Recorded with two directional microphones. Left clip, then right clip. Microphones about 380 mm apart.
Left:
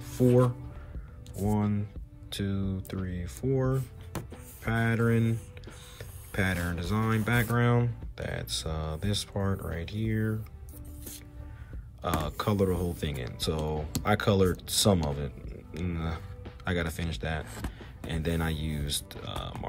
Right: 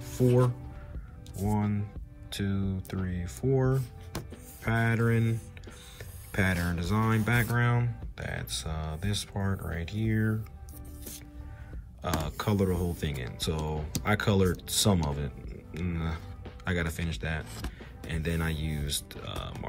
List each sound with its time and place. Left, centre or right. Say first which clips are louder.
0.0 s music: left 2 dB; centre
1.4 s speech: left 1 dB; centre
12.0 s speech: left 2 dB; centre